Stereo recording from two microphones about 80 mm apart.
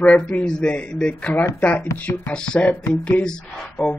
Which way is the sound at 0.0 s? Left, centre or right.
Centre.